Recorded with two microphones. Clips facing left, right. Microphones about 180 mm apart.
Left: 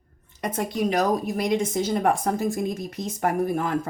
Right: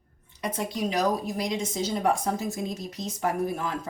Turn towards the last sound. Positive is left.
turn(degrees=55)  # may be behind; listen again after turning